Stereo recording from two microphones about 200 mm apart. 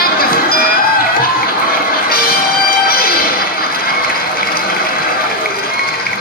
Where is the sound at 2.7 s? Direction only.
50° left (ahead or behind).